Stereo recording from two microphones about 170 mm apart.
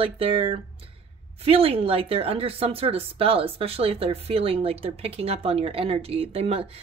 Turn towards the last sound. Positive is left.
turn(degrees=-35)  # may be behind; listen again after turning